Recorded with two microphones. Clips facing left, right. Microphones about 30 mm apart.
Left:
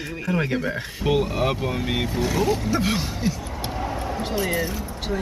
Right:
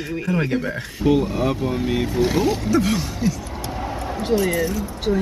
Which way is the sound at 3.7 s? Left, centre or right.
Centre.